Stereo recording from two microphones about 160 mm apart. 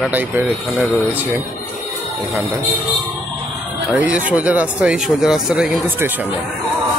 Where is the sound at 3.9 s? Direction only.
10° right (ahead or behind).